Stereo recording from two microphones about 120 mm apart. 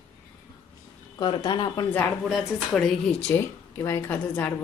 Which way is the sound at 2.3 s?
Centre (ahead or behind).